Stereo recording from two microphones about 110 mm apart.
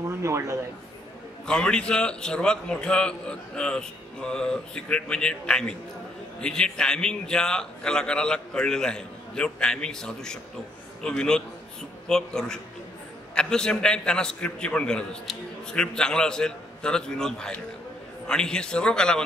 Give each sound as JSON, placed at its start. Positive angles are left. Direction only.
{"t": 0.1, "sound": "a man's voice", "side_deg": -25}
{"t": 1.4, "sound": "a man's voice", "side_deg": 10}